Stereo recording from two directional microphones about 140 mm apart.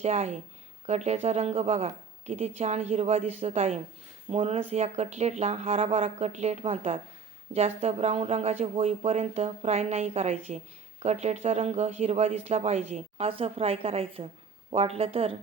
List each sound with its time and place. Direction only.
0.0 s speech: 50° right (ahead or behind)